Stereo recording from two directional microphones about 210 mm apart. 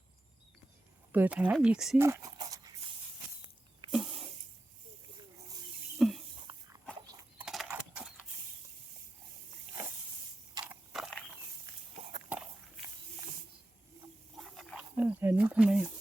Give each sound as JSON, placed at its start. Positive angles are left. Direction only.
{"t": 1.1, "sound": "speech", "side_deg": -10}
{"t": 2.0, "sound": "a sound", "side_deg": -15}
{"t": 3.9, "sound": "snake", "side_deg": 0}
{"t": 6.0, "sound": "a sound", "side_deg": 0}
{"t": 6.5, "sound": "dog", "side_deg": -15}
{"t": 7.3, "sound": "horse", "side_deg": 0}
{"t": 10.7, "sound": "mechanisms", "side_deg": 0}
{"t": 14.3, "sound": "wild animals", "side_deg": 0}